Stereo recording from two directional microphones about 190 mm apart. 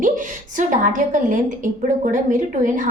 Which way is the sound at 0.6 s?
45° right (ahead or behind).